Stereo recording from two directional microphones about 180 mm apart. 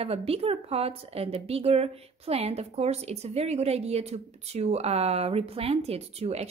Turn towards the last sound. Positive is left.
turn(degrees=-35)  # may be behind; listen again after turning